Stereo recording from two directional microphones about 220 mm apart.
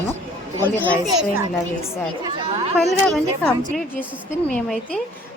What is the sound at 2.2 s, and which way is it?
Speech, 30° right (ahead or behind).